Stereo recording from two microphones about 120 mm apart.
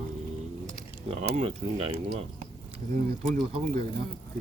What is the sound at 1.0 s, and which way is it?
Speech, 55° right (ahead or behind).